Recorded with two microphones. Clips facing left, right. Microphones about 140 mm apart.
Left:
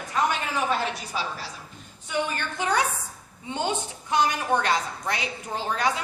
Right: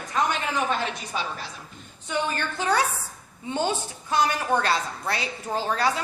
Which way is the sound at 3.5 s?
15° left (ahead or behind).